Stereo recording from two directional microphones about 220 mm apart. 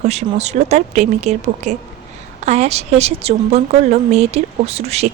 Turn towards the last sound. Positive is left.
turn(degrees=-30)  # may be behind; listen again after turning